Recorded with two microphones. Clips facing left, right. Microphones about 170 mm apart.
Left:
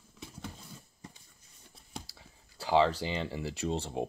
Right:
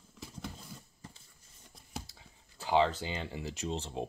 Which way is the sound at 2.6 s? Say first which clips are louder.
Left 2 dB; 35° left (ahead or behind).